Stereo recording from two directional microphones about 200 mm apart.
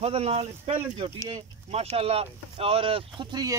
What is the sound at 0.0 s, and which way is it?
Speech, 30° right (ahead or behind).